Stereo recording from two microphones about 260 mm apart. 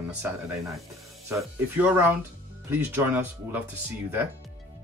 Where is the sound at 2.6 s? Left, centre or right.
Centre.